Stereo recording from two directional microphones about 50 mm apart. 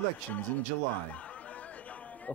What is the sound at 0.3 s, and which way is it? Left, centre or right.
A man's voice, left.